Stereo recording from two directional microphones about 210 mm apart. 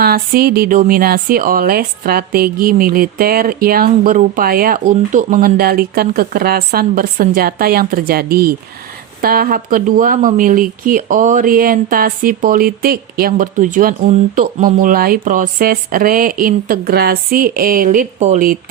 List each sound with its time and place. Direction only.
0.0 s speech: 45° right (ahead or behind)